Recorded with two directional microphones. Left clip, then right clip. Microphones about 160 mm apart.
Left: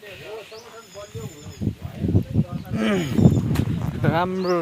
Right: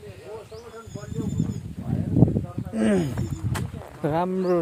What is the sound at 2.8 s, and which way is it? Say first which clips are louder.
Speech: even; 20° right (ahead or behind).